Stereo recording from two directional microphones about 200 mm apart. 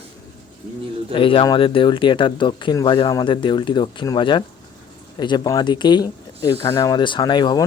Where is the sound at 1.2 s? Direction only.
25° left (ahead or behind).